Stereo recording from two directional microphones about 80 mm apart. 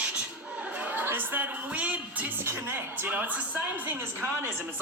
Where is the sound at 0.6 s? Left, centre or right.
Centre.